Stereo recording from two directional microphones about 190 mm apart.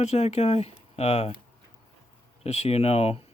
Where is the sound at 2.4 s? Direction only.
35° left (ahead or behind).